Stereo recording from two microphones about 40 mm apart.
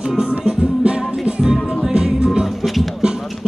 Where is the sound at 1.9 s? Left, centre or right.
Centre.